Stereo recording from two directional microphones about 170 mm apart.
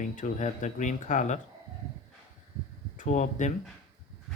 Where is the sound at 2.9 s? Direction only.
45° left (ahead or behind).